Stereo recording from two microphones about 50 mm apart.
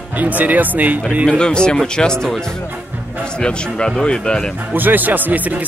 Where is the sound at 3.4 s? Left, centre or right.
Centre.